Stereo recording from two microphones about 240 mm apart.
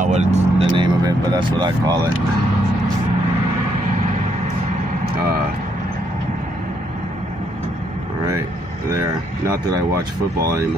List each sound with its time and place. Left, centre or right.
0.0 s vehicle: right
9.5 s speech: centre